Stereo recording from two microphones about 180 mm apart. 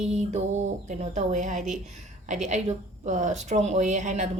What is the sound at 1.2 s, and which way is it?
A woman's voice, 45° right (ahead or behind).